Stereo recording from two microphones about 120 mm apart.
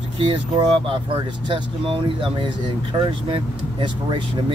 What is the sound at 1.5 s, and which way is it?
Speech, 45° right (ahead or behind).